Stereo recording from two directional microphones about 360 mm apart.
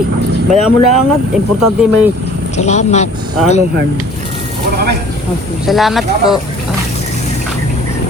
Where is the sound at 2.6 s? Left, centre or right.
Centre.